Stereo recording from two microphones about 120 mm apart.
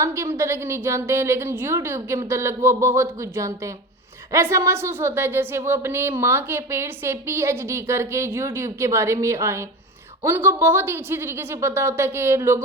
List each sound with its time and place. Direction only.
0.0 s a woman's voice: 25° right (ahead or behind)